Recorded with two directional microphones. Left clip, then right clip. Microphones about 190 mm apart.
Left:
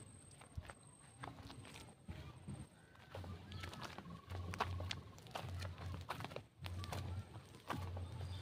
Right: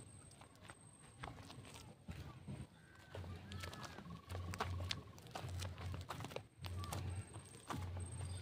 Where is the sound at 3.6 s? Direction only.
55° right (ahead or behind).